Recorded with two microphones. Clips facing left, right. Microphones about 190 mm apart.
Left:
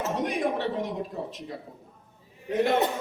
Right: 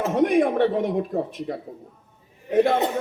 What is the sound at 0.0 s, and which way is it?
Speech, 55° right (ahead or behind).